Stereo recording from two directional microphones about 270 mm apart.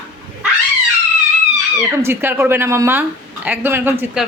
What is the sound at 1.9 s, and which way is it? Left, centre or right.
A woman's voice, centre.